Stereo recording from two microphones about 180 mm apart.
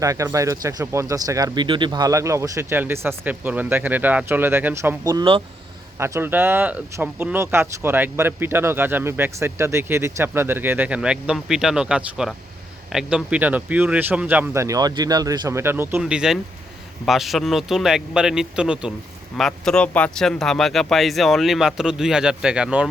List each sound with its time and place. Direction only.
0.0 s speech: 20° right (ahead or behind)
6.0 s speech: 15° right (ahead or behind)